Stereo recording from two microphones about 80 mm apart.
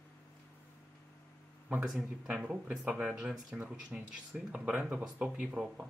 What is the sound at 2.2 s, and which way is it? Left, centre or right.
Speech, centre.